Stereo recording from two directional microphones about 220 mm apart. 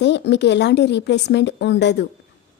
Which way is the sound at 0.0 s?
50° left (ahead or behind).